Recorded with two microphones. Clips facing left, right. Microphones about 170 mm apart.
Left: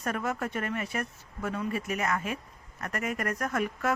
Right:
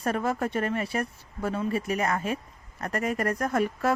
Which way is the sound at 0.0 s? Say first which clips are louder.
Right 4 dB; 30° right (ahead or behind).